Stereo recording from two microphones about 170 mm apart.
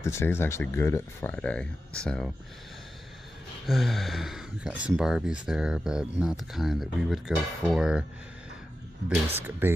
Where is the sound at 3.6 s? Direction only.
Centre (ahead or behind).